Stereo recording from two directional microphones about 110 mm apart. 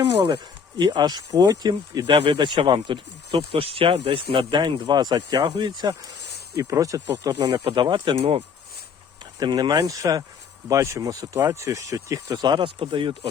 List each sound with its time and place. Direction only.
0.8 s speech: 40° right (ahead or behind)
2.0 s speech: 55° right (ahead or behind)
6.6 s speech: 30° right (ahead or behind)
7.7 s speech: 45° right (ahead or behind)
8.2 s speech: 65° right (ahead or behind)
9.4 s speech: 40° right (ahead or behind)